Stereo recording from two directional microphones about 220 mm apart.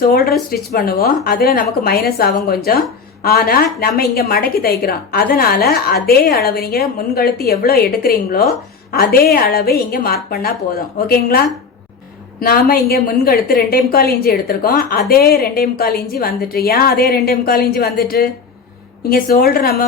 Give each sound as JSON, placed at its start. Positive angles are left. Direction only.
{"t": 0.0, "sound": "a woman's voice", "side_deg": 45}